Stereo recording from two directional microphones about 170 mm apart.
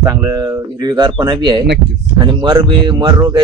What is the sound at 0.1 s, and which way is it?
Speech, 20° right (ahead or behind).